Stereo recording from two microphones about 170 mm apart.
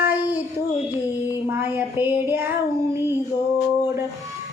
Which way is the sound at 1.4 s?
10° right (ahead or behind).